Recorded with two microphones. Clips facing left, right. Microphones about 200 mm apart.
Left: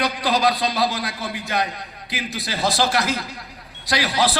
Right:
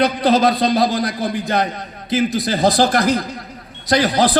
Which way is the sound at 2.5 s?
50° right (ahead or behind).